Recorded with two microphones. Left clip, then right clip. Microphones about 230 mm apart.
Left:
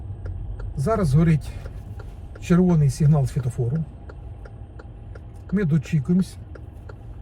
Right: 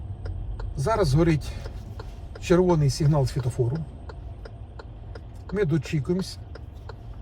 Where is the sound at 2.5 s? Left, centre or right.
Right.